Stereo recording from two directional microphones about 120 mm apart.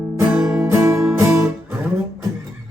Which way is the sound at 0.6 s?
20° right (ahead or behind).